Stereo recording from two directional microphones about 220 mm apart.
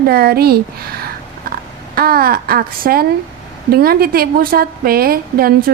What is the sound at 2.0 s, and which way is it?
A woman's voice, 40° right (ahead or behind).